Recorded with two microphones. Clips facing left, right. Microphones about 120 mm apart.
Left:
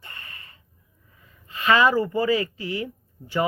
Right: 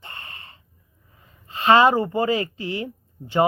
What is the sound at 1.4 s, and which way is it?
Speech, 30° right (ahead or behind).